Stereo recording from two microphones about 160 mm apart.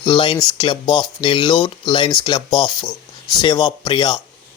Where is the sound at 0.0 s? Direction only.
30° left (ahead or behind).